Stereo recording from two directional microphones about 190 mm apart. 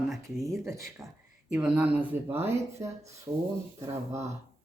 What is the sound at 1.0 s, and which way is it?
Speech, 15° right (ahead or behind).